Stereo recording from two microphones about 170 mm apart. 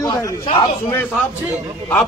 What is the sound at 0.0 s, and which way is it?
Speech, 25° left (ahead or behind).